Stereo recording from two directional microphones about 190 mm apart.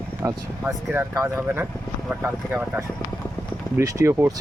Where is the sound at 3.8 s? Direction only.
15° right (ahead or behind).